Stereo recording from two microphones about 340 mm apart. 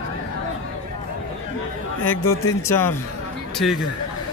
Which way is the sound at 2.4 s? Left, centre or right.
Centre.